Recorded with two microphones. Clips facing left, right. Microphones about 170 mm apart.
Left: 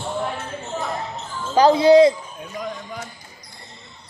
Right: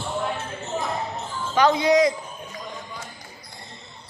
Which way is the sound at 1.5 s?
30° left (ahead or behind).